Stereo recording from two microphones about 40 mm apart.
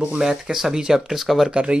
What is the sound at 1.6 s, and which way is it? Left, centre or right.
Speech, right.